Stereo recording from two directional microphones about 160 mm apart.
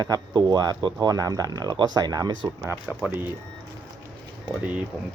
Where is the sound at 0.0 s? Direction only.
25° right (ahead or behind).